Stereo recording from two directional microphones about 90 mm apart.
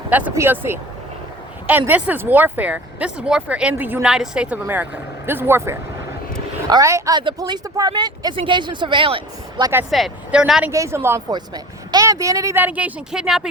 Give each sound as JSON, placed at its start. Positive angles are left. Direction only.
{"t": 0.1, "sound": "speech", "side_deg": -15}
{"t": 4.0, "sound": "speech", "side_deg": -5}
{"t": 6.8, "sound": "speech", "side_deg": -35}
{"t": 7.1, "sound": "speech", "side_deg": -65}
{"t": 7.3, "sound": "speech", "side_deg": -45}
{"t": 8.4, "sound": "speech", "side_deg": -65}
{"t": 10.3, "sound": "speech", "side_deg": -10}
{"t": 10.7, "sound": "speech", "side_deg": -35}
{"t": 11.3, "sound": "speech", "side_deg": -50}
{"t": 12.5, "sound": "speech", "side_deg": -15}